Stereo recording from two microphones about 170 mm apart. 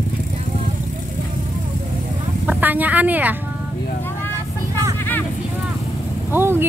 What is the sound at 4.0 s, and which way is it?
Vehicle, 10° left (ahead or behind).